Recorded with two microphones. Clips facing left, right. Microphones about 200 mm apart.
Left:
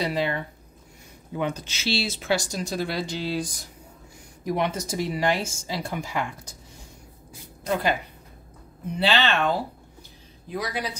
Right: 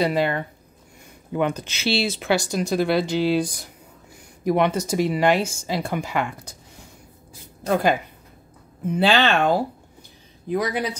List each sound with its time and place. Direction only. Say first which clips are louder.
0.0 s speech: right 5 dB; 55° right (ahead or behind)
4.5 s speech: right 6 dB; 65° right (ahead or behind)
7.6 s speech: right 5 dB; 50° right (ahead or behind)
10.5 s speech: right 6 dB; 55° right (ahead or behind)